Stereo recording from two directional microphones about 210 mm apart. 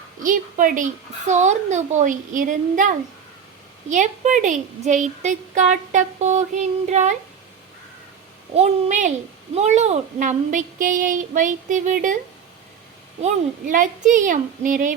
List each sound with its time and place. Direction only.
0.2 s a woman's voice: 40° right (ahead or behind)
3.8 s a woman's voice: 35° right (ahead or behind)
8.5 s a woman's voice: 30° right (ahead or behind)
13.2 s a woman's voice: 40° right (ahead or behind)